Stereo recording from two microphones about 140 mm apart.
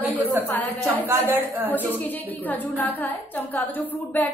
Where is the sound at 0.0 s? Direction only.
15° right (ahead or behind).